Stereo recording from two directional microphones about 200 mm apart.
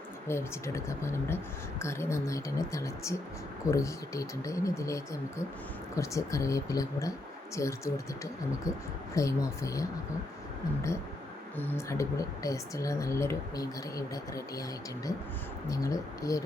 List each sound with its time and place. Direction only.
0.3 s a woman's voice: 15° left (ahead or behind)
11.5 s a woman's voice: 10° left (ahead or behind)
15.7 s a woman's voice: 15° left (ahead or behind)